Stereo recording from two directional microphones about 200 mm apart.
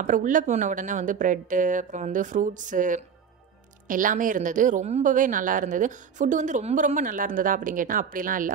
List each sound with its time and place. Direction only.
0.0 s speech: 40° right (ahead or behind)